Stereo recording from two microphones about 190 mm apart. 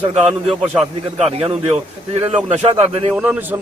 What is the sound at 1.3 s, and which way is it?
A man's voice, 30° right (ahead or behind).